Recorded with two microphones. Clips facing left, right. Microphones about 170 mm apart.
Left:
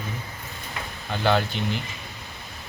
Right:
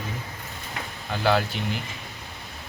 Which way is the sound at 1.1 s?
5° right (ahead or behind).